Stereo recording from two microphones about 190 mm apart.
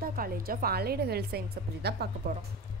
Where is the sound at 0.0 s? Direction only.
50° right (ahead or behind).